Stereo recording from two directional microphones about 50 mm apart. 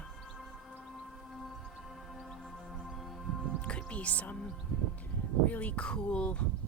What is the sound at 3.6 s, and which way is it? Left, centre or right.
Music, left.